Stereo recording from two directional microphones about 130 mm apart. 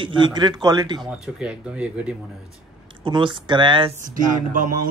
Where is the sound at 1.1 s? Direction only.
10° right (ahead or behind).